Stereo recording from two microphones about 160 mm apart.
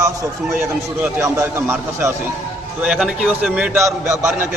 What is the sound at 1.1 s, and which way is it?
A man's voice, 15° right (ahead or behind).